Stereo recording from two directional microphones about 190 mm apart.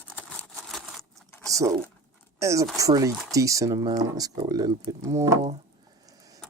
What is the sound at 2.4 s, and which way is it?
Speech, 15° right (ahead or behind).